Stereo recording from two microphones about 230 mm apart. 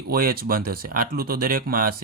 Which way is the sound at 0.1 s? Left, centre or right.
Right.